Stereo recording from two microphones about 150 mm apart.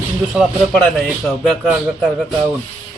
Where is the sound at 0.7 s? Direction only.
5° left (ahead or behind).